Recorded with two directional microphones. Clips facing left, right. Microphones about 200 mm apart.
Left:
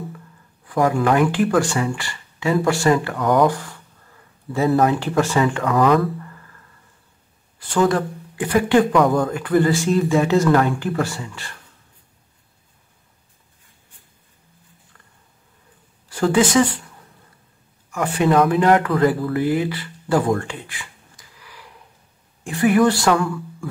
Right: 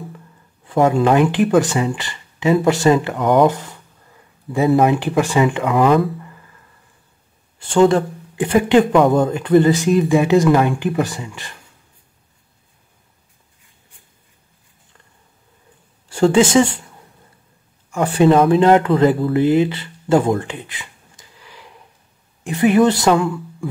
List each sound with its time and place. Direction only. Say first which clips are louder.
0.7 s speech: right 3 dB; 25° right (ahead or behind)
7.5 s speech: right 5 dB; 25° right (ahead or behind)
16.1 s speech: right 4 dB; 25° right (ahead or behind)
17.9 s speech: right 4 dB; 30° right (ahead or behind)